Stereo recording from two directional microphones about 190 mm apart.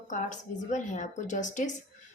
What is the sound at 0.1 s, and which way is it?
Speech, 40° left (ahead or behind).